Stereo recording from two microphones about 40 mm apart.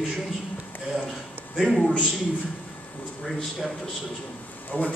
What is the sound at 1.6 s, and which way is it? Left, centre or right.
Speech, centre.